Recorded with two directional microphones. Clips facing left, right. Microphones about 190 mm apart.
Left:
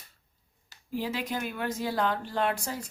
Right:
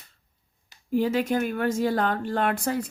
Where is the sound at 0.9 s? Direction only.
50° right (ahead or behind).